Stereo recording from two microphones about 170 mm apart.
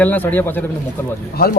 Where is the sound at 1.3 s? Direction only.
65° left (ahead or behind).